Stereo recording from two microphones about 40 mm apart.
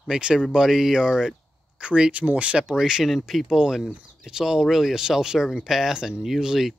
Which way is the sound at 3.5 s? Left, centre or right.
Centre.